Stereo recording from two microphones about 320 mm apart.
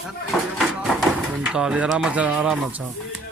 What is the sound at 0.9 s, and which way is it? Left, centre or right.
Speech, centre.